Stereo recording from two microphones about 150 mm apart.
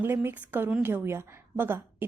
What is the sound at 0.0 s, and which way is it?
A woman's voice, 15° right (ahead or behind).